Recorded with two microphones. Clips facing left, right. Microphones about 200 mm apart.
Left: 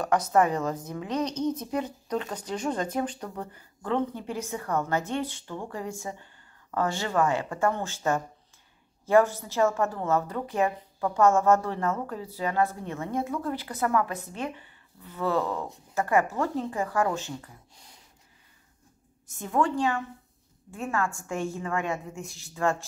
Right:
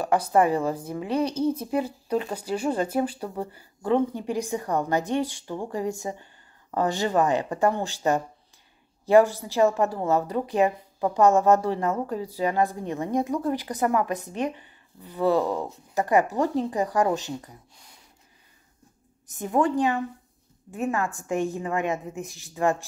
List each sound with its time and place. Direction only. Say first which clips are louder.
0.3 s a woman's voice: right 3 dB; 10° right (ahead or behind)
9.4 s a woman's voice: right 3 dB; 15° right (ahead or behind)
19.3 s a woman's voice: right 3 dB; 15° right (ahead or behind)